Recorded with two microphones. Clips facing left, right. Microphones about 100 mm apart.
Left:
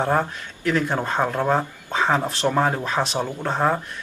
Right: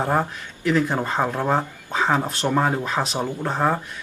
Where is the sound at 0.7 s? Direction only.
5° right (ahead or behind).